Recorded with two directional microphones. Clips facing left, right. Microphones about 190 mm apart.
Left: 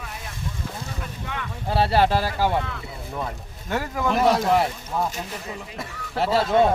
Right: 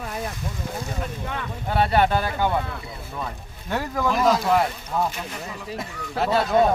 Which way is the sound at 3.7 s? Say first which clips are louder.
Even; 5° left (ahead or behind).